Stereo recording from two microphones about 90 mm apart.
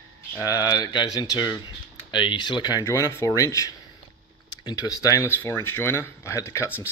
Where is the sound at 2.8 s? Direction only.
35° left (ahead or behind).